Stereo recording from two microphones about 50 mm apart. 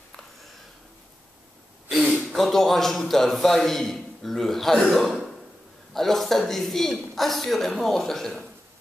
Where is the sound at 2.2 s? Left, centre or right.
Centre.